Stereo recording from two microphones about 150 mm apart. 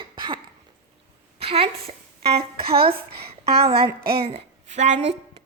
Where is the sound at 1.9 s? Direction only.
40° right (ahead or behind).